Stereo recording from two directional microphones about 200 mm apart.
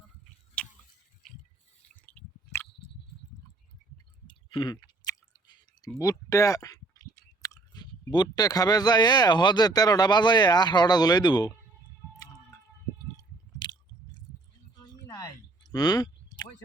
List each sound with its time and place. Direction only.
0.6 s tick-tock: 5° left (ahead or behind)
4.3 s chewing: 25° left (ahead or behind)
6.0 s speech: 15° left (ahead or behind)
13.1 s squish: 20° left (ahead or behind)
14.8 s a sound: 15° left (ahead or behind)